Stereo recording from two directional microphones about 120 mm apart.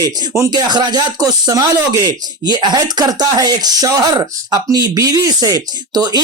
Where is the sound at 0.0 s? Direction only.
30° right (ahead or behind).